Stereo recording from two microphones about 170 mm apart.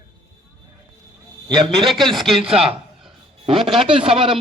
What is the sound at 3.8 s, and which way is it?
Speech, 30° right (ahead or behind).